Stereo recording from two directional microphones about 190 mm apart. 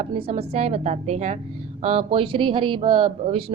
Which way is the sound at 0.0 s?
30° right (ahead or behind).